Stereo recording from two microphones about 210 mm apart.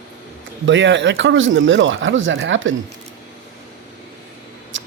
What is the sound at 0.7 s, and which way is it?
Speech, 60° right (ahead or behind).